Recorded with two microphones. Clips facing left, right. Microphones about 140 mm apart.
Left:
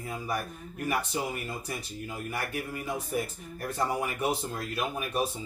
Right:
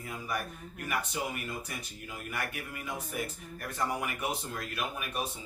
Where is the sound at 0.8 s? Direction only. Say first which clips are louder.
Left 4 dB; 30° left (ahead or behind).